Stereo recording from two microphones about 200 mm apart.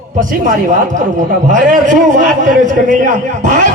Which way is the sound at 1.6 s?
40° right (ahead or behind).